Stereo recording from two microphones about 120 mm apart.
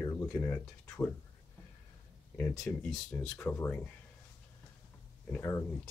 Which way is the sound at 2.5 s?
5° left (ahead or behind).